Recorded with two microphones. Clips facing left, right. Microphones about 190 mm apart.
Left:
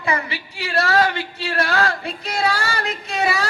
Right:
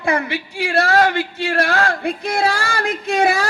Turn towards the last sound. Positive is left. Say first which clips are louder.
# right 5 dB
turn(degrees=-50)  # may be behind; listen again after turning